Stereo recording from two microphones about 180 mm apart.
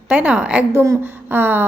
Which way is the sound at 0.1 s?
5° right (ahead or behind).